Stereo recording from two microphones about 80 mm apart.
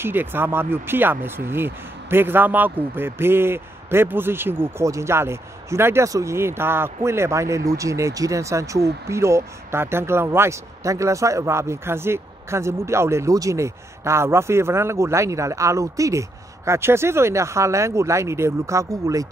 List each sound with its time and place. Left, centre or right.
0.0 s speech: right